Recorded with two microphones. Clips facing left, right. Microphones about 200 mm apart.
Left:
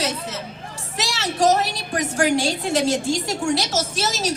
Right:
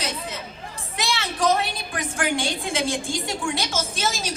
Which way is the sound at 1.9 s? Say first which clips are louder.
Left 8 dB; 40° left (ahead or behind).